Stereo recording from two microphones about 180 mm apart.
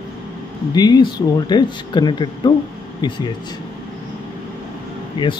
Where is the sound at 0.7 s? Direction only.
25° left (ahead or behind).